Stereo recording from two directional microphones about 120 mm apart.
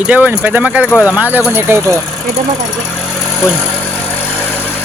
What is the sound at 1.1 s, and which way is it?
Speech, 15° right (ahead or behind).